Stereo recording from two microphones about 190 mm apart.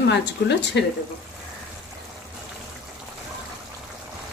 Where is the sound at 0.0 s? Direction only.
65° left (ahead or behind).